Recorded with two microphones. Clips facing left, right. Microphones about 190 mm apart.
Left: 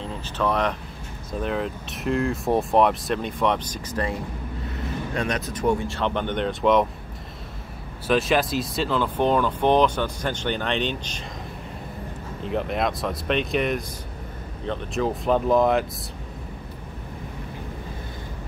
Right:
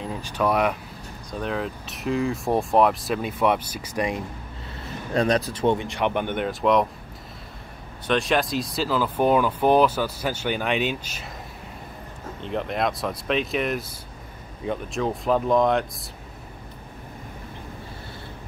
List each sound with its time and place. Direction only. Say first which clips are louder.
0.0 s speech: right 1 dB; 10° right (ahead or behind)
1.4 s speech: left 1 dB; centre (ahead or behind)
5.1 s speech: right 8 dB; 35° right (ahead or behind); by 6.9 s centre (ahead or behind)
8.1 s speech: left 1 dB; centre (ahead or behind)
12.4 s speech: left 1 dB; centre (ahead or behind)
15.0 s speech: left 1 dB; centre (ahead or behind)